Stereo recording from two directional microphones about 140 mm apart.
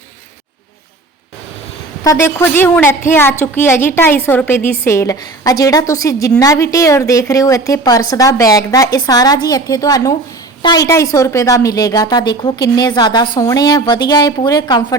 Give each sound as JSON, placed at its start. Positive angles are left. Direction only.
{"t": 2.0, "sound": "a woman's voice", "side_deg": 20}